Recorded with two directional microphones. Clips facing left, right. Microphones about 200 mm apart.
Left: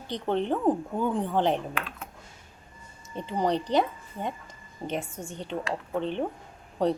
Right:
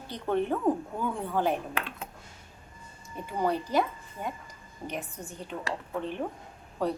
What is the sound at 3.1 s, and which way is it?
A woman's voice, 20° left (ahead or behind).